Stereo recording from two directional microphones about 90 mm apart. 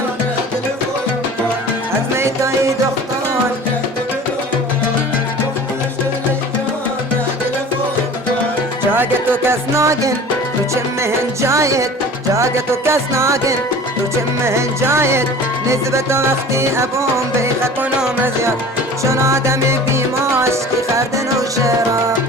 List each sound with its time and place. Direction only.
2.1 s music: 30° right (ahead or behind)
8.9 s music: 25° right (ahead or behind)
19.0 s music: 30° right (ahead or behind)